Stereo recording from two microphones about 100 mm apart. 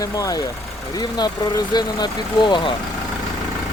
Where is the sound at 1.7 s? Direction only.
45° left (ahead or behind).